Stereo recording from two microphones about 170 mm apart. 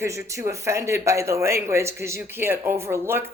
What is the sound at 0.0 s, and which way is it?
Speech, 15° right (ahead or behind).